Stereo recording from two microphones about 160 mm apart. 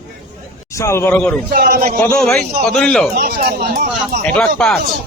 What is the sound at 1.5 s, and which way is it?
Speech, 70° right (ahead or behind).